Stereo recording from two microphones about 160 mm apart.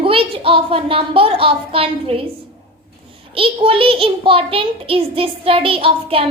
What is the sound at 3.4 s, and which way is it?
Child singing, 35° right (ahead or behind).